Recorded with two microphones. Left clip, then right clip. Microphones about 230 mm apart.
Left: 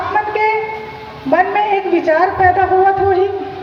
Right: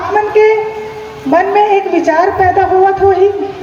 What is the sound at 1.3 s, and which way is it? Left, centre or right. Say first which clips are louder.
A woman's voice: right 4 dB; right.